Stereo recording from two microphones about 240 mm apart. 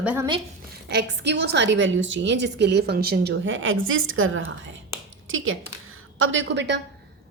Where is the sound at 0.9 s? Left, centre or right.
Right.